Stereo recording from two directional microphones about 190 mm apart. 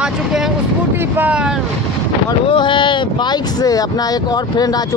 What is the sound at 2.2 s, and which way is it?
Speech, 25° left (ahead or behind).